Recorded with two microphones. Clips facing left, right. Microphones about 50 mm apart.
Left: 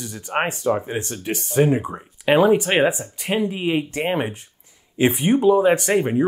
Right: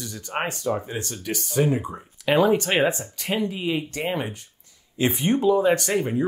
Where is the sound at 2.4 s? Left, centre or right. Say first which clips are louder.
Left 3 dB; centre.